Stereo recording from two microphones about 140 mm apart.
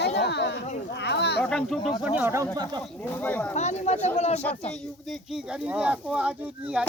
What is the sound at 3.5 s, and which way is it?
Speech, 55° left (ahead or behind).